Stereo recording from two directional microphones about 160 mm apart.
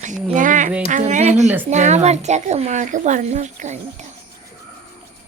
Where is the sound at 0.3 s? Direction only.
55° right (ahead or behind).